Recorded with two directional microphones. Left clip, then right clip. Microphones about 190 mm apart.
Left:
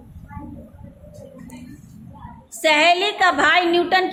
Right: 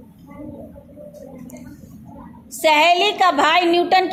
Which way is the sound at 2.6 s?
25° right (ahead or behind).